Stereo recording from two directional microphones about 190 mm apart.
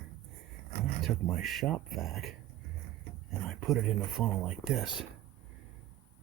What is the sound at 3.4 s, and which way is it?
Speech, centre (ahead or behind).